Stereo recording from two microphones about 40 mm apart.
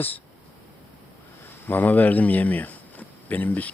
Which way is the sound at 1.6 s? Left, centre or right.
Left.